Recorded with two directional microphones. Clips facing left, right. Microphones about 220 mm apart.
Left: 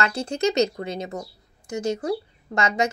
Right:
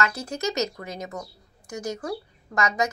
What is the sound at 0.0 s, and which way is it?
Speech, 30° left (ahead or behind).